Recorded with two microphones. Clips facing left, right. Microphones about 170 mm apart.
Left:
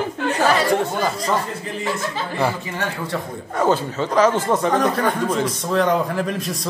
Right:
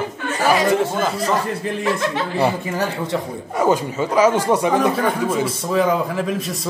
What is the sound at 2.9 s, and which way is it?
Speech, 20° right (ahead or behind).